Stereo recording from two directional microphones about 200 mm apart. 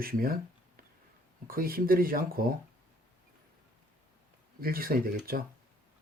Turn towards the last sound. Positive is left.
turn(degrees=-45)  # may be behind; listen again after turning